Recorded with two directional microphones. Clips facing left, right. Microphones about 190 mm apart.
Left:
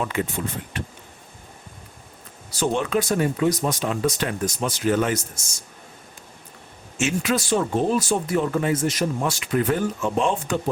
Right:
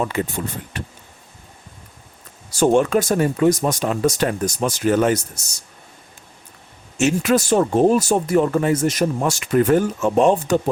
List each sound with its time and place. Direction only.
0.0 s speech: 40° right (ahead or behind)
2.5 s speech: 45° right (ahead or behind)
6.9 s speech: 45° right (ahead or behind)